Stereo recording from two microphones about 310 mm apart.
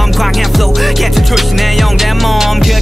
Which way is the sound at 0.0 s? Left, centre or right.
Centre.